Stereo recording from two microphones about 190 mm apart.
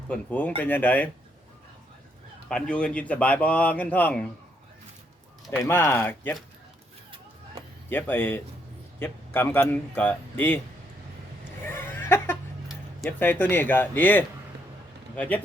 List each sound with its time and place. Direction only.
0.1 s speech: 10° left (ahead or behind)
2.5 s speech: 5° left (ahead or behind)
5.5 s speech: 10° left (ahead or behind)
7.9 s speech: 10° left (ahead or behind)
11.6 s a sound: 10° left (ahead or behind)
13.1 s speech: 10° left (ahead or behind)